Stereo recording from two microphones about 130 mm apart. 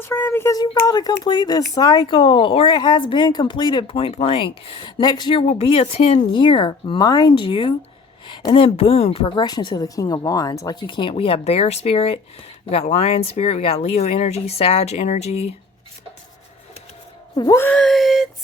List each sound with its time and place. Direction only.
0.0 s a sound: 20° left (ahead or behind)
0.5 s speech: 30° left (ahead or behind)
3.9 s speech: 50° left (ahead or behind)
8.6 s speech: 50° left (ahead or behind)
9.2 s speech: 35° left (ahead or behind)
10.8 s speech: 40° left (ahead or behind); by 15.5 s 55° left (ahead or behind)
17.3 s speech: 30° left (ahead or behind)
17.6 s speech: 10° left (ahead or behind)